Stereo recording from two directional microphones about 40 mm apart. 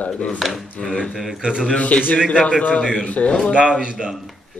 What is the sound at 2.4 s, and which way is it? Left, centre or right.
Speech, left.